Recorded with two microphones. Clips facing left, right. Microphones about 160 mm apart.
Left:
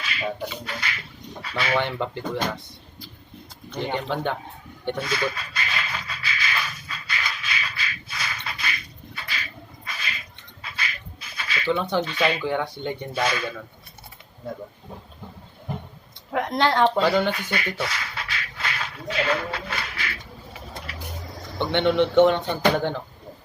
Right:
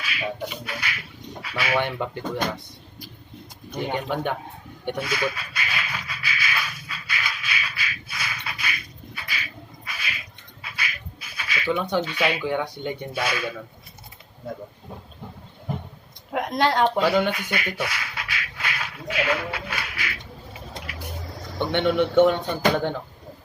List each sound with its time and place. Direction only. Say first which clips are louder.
0.0 s speech: left 1 dB; 10° right (ahead or behind)
3.7 s speech: even; 10° right (ahead or behind)
4.9 s a sound: even; 10° right (ahead or behind)
10.6 s speech: even; 10° right (ahead or behind)
16.3 s a woman's voice: even; 20° right (ahead or behind)
17.0 s a sound: even; 15° right (ahead or behind)
20.5 s vehicle: even; 20° right (ahead or behind)
21.6 s speech: left 1 dB; 10° right (ahead or behind)